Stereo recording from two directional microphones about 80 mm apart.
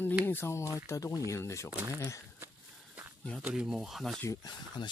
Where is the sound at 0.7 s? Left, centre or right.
Left.